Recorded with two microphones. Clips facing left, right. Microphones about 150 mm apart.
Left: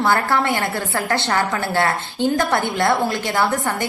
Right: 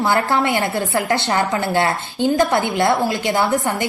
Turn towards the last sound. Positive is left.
turn(degrees=-20)  # may be behind; listen again after turning